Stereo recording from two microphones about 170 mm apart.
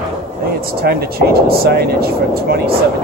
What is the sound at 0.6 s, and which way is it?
Speech, 65° right (ahead or behind).